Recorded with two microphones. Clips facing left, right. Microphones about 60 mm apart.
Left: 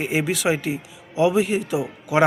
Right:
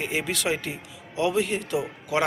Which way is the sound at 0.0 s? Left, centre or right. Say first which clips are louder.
Left 5 dB; centre.